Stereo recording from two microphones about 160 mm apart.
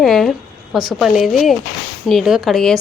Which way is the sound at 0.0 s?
Centre (ahead or behind).